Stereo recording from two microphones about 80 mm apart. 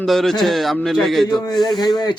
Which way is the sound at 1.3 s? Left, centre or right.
Left.